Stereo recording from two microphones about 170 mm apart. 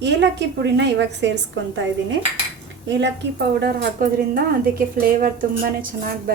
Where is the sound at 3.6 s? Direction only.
65° right (ahead or behind).